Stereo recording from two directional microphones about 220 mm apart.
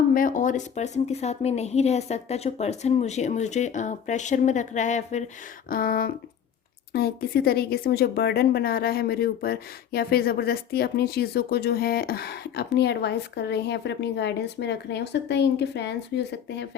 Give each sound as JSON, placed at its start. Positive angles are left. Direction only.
{"t": 0.1, "sound": "a woman's voice", "side_deg": 40}